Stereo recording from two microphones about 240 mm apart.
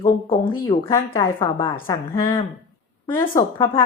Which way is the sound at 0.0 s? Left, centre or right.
Left.